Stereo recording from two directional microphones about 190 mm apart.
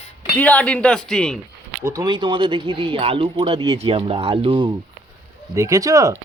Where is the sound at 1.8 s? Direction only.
20° right (ahead or behind).